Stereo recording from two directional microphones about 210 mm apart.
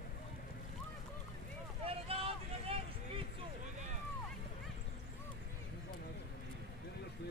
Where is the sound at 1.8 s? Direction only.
25° right (ahead or behind).